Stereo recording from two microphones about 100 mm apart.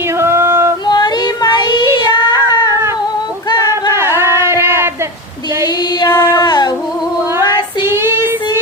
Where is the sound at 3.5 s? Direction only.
45° left (ahead or behind).